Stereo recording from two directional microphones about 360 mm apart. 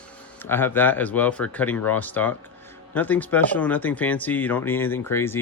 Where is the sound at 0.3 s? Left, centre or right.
Centre.